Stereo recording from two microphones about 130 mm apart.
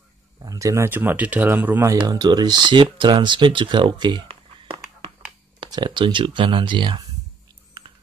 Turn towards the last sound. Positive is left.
turn(degrees=-35)  # may be behind; listen again after turning